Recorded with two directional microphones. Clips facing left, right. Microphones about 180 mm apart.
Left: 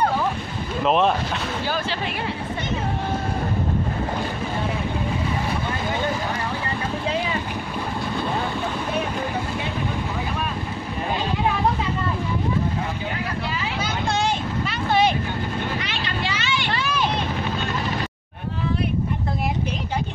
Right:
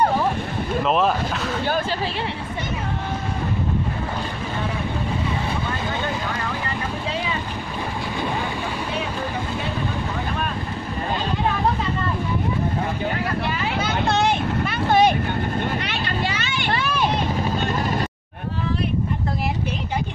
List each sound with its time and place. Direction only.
0.8 s speech: centre (ahead or behind)
13.7 s vehicle: 60° right (ahead or behind)
16.5 s a sound: 50° right (ahead or behind)